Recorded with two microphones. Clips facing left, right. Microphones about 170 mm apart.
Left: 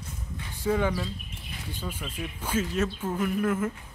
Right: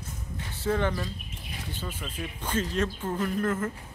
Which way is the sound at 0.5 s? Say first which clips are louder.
Left 1 dB; 10° left (ahead or behind).